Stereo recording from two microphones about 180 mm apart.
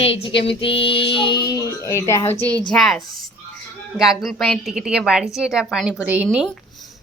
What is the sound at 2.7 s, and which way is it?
A woman's voice, centre (ahead or behind).